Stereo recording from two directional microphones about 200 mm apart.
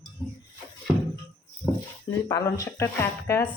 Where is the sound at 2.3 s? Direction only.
15° left (ahead or behind).